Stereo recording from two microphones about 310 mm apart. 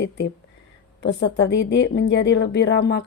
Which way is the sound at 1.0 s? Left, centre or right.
Left.